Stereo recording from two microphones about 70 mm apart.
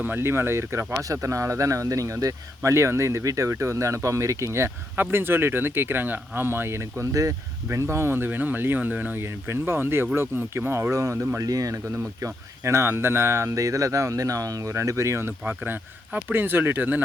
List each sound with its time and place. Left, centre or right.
0.0 s speech: right
4.9 s speech: right
7.1 s speech: right
10.9 s speech: right
12.2 s speech: right
14.7 s speech: right
15.4 s speech: right